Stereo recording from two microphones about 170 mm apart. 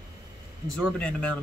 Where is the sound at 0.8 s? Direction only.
5° left (ahead or behind).